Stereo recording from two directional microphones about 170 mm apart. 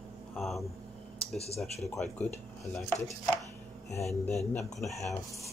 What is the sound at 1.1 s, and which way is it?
Speech, 35° left (ahead or behind).